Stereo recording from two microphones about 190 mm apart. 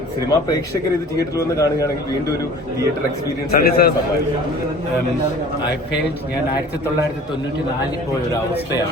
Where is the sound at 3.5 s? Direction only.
55° left (ahead or behind).